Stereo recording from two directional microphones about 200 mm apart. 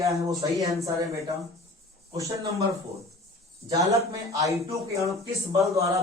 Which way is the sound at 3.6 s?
15° right (ahead or behind).